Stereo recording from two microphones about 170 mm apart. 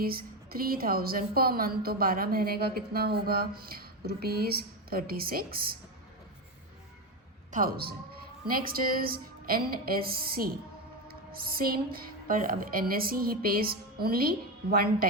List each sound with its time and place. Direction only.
0.0 s a woman's voice: 60° right (ahead or behind)
7.5 s a woman's voice: 60° right (ahead or behind)